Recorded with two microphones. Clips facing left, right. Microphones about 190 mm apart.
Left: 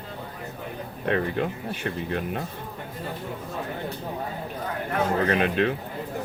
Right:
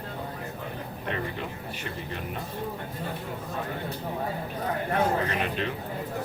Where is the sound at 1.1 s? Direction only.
60° left (ahead or behind).